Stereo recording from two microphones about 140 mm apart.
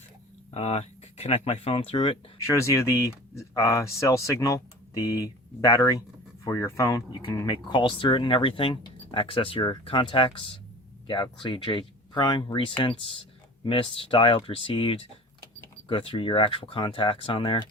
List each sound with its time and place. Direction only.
0.5 s speech: 45° left (ahead or behind)
2.4 s speech: 20° left (ahead or behind)
7.3 s speech: 30° left (ahead or behind)